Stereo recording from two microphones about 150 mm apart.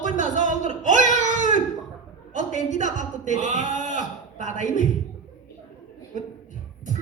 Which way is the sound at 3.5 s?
60° left (ahead or behind).